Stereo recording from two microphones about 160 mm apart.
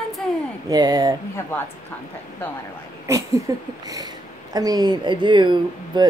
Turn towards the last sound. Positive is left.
turn(degrees=-30)  # may be behind; listen again after turning